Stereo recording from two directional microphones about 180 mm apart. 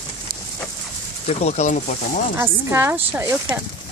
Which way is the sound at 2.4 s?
15° right (ahead or behind).